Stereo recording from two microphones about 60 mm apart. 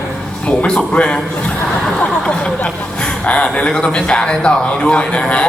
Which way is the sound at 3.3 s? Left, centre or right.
Centre.